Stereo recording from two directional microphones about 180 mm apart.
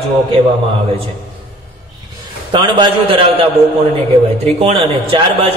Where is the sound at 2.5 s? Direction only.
25° right (ahead or behind).